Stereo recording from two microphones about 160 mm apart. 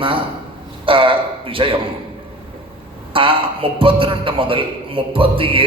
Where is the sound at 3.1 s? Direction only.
35° right (ahead or behind).